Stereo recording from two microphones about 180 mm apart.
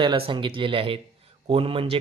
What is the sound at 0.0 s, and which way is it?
Speech, 25° right (ahead or behind).